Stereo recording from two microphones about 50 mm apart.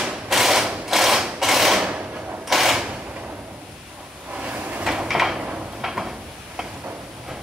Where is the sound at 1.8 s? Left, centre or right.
Right.